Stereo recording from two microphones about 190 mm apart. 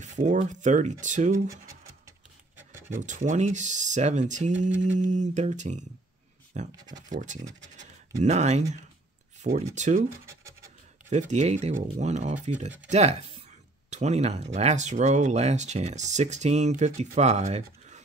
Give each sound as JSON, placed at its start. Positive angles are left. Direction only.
{"t": 0.0, "sound": "speech", "side_deg": -40}
{"t": 3.0, "sound": "speech", "side_deg": -40}
{"t": 11.1, "sound": "speech", "side_deg": -40}